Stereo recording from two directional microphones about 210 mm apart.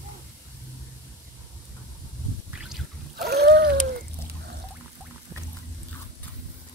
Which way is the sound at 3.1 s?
50° right (ahead or behind).